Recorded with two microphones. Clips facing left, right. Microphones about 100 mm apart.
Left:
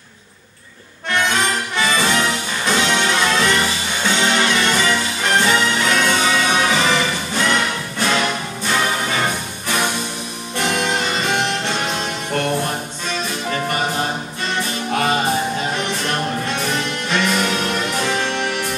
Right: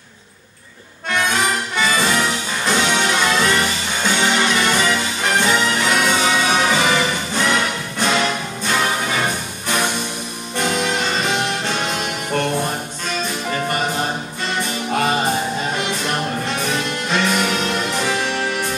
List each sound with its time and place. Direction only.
1.3 s music: centre (ahead or behind)
15.8 s music: 10° right (ahead or behind)